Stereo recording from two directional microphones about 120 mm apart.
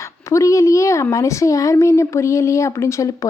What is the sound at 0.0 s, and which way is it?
A woman's voice, 25° left (ahead or behind).